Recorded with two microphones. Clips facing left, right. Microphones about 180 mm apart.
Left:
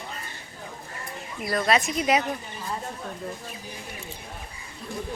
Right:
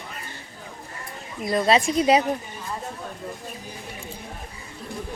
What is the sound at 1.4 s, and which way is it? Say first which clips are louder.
Speech: right 4 dB; 20° right (ahead or behind).